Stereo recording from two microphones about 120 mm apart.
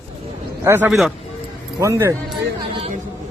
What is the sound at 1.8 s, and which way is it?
Speech, 25° right (ahead or behind).